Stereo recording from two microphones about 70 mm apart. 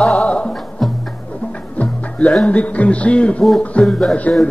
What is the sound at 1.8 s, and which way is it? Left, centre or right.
Music, centre.